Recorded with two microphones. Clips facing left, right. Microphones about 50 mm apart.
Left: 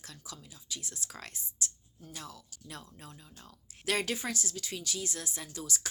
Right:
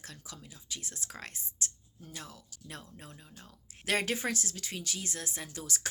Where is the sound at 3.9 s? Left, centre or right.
Right.